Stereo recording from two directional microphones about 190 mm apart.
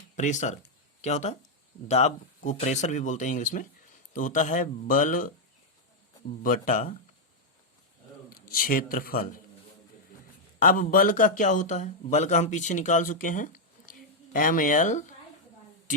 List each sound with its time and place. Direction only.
0.2 s speech: 40° left (ahead or behind)
6.4 s speech: 45° left (ahead or behind)
8.3 s a man's voice: 50° left (ahead or behind)
10.6 s speech: 45° left (ahead or behind)